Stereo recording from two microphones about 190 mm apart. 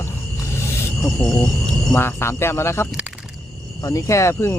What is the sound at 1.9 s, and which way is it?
Speech, 10° left (ahead or behind).